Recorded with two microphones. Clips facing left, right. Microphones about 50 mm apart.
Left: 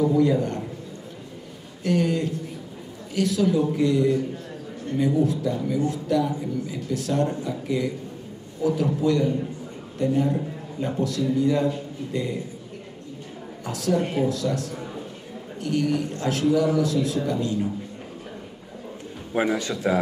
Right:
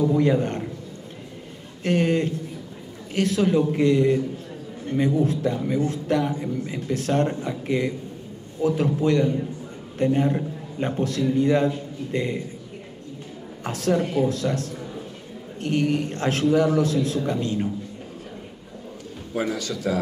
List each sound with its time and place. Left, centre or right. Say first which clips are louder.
0.1 s a man's voice: even; right
1.9 s a man's voice: right 2 dB; right
9.0 s a man's voice: right 1 dB; right
13.7 s a man's voice: right 1 dB; right
19.3 s a man's voice: left 3 dB; left